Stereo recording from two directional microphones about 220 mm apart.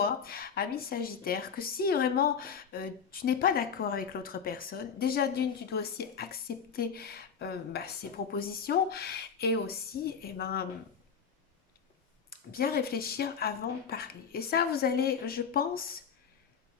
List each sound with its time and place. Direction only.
0.0 s a woman's voice: 45° left (ahead or behind)
12.3 s a woman's voice: 45° left (ahead or behind)